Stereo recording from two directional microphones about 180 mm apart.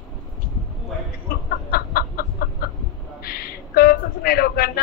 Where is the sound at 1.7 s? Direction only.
55° left (ahead or behind).